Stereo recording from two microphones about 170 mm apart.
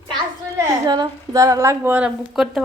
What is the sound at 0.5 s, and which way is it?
A woman's voice, 25° right (ahead or behind).